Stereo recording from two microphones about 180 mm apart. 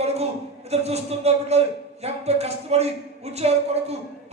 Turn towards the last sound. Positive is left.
turn(degrees=-35)  # may be behind; listen again after turning